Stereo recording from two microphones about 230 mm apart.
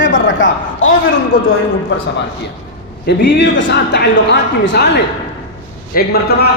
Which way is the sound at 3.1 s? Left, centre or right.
Left.